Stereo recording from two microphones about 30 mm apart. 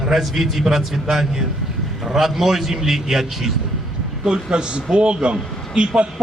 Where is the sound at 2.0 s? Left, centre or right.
Centre.